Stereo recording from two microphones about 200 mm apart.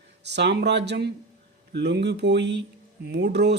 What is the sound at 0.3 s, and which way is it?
A man's voice, 60° right (ahead or behind).